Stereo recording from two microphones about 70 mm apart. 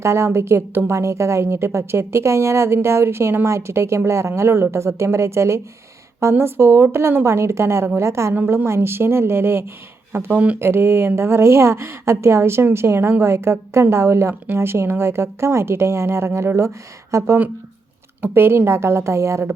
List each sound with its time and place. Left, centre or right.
0.0 s a woman's voice: right
8.3 s a woman's voice: right
10.6 s a woman's voice: right